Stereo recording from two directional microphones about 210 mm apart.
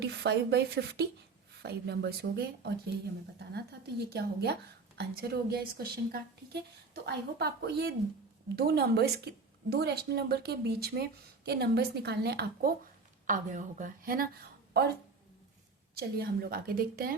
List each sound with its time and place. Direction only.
0.0 s a woman's voice: 50° right (ahead or behind)
13.2 s a woman's voice: 35° right (ahead or behind)
16.0 s a woman's voice: 50° right (ahead or behind)